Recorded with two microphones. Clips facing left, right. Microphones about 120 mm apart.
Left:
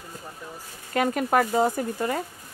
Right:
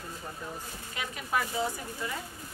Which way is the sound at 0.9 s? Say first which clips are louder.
Left 11 dB; 55° left (ahead or behind).